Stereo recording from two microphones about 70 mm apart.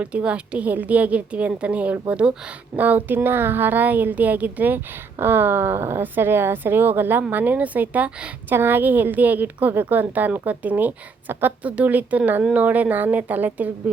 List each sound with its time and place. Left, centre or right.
0.0 s a woman's voice: centre
8.4 s a woman's voice: right
11.6 s a woman's voice: centre